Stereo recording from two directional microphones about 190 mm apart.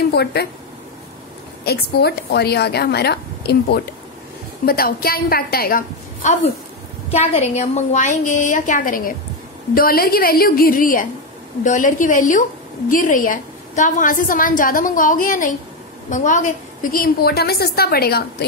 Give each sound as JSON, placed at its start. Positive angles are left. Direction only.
{"t": 0.1, "sound": "a woman's voice", "side_deg": 60}
{"t": 1.6, "sound": "a woman's voice", "side_deg": 60}
{"t": 7.1, "sound": "a woman's voice", "side_deg": 35}